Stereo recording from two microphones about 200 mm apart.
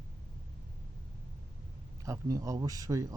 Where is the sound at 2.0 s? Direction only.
15° right (ahead or behind).